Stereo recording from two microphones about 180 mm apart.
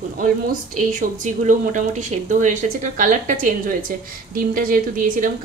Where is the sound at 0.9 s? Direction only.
45° right (ahead or behind).